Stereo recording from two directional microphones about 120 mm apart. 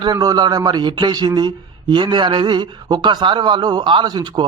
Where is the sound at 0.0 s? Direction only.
35° right (ahead or behind).